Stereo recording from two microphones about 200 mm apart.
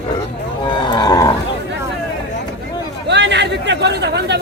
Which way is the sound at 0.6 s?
25° left (ahead or behind).